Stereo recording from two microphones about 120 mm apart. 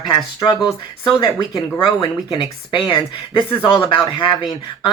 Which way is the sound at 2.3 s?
40° left (ahead or behind).